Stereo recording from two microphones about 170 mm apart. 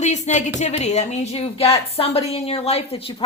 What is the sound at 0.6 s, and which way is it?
Speech, 40° left (ahead or behind).